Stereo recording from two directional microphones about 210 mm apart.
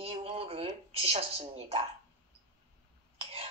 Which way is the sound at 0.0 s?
30° right (ahead or behind).